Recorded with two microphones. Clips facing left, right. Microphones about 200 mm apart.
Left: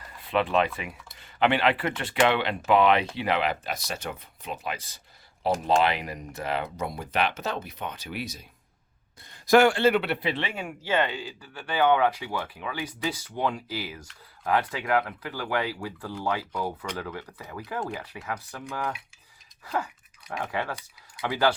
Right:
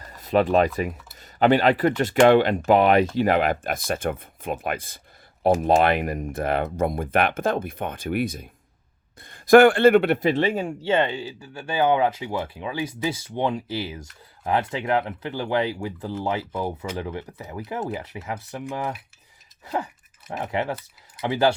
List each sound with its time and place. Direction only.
0.0 s speech: 40° right (ahead or behind); by 21.5 s 25° right (ahead or behind)